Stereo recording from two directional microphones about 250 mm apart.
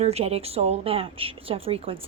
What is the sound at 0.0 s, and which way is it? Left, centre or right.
A woman's voice, right.